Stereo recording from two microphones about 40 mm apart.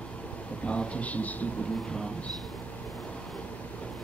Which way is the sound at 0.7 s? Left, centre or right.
Left.